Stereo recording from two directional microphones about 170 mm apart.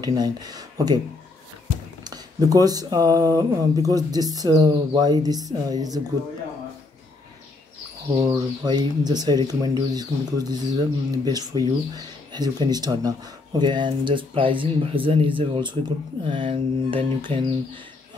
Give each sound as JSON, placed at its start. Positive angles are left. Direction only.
{"t": 0.0, "sound": "speech", "side_deg": -25}
{"t": 2.0, "sound": "speech", "side_deg": -20}
{"t": 8.2, "sound": "speech", "side_deg": -25}
{"t": 16.3, "sound": "mantra", "side_deg": -30}